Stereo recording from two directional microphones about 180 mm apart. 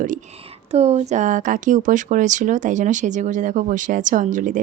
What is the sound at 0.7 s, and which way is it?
A woman's voice, 35° right (ahead or behind).